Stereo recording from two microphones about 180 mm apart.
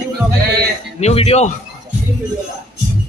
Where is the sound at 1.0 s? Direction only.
35° left (ahead or behind).